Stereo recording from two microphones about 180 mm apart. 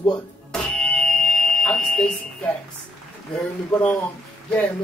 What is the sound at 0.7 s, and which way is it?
Fire alarm, 5° left (ahead or behind).